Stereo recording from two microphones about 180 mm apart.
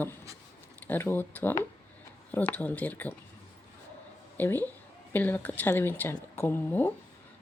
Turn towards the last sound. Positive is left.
turn(degrees=10)  # may be behind; listen again after turning